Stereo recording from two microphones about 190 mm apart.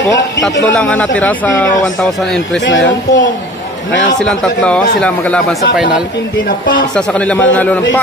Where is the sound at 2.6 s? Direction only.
70° left (ahead or behind).